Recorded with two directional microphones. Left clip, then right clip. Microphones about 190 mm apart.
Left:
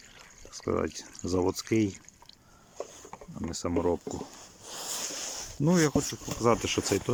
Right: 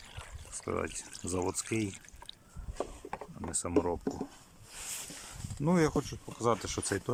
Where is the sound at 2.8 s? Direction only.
5° left (ahead or behind).